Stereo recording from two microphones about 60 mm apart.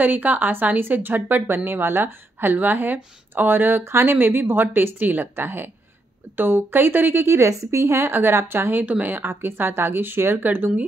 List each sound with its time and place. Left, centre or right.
0.0 s speech: right
8.8 s speech: right
9.1 s speech: right